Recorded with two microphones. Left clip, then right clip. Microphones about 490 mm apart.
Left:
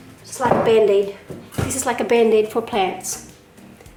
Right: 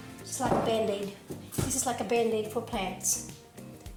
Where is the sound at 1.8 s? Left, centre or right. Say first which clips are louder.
Left 12 dB; centre.